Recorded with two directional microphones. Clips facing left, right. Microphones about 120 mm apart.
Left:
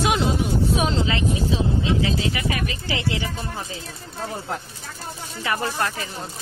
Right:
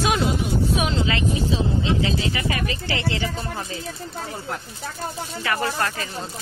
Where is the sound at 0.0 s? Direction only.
20° left (ahead or behind).